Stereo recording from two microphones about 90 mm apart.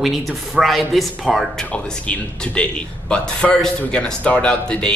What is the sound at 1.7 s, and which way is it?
Speech, 10° left (ahead or behind).